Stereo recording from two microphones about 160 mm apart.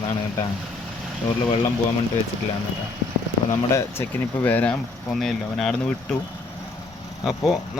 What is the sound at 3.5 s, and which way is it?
Speech, 20° left (ahead or behind).